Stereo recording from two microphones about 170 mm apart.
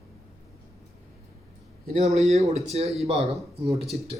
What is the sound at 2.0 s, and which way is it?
A man's voice, 40° right (ahead or behind).